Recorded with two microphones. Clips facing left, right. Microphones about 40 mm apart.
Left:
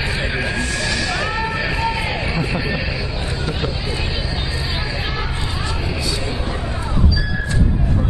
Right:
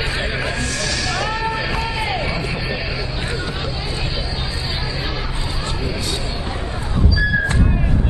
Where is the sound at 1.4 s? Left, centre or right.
Centre.